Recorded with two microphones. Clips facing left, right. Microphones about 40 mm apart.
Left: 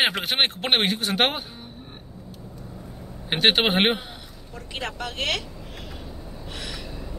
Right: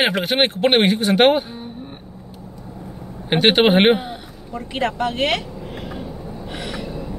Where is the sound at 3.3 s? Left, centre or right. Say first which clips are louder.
Right 6 dB; centre.